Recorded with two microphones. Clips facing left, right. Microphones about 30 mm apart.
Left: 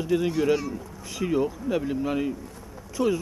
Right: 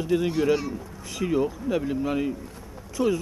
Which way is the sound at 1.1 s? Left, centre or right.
Centre.